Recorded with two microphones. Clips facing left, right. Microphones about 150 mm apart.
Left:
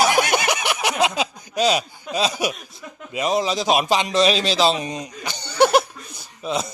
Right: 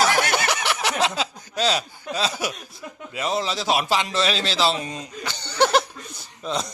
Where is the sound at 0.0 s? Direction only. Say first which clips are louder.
Left 2 dB; 15° left (ahead or behind).